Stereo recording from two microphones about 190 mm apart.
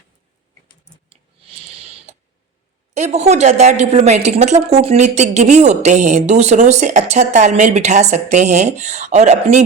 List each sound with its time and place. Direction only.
1.1 s clicking: 30° right (ahead or behind)
2.9 s a woman's voice: 35° right (ahead or behind)